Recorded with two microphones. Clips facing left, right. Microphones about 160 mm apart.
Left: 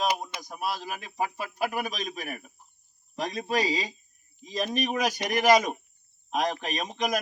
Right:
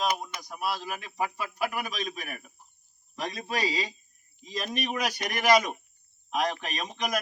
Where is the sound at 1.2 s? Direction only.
40° left (ahead or behind).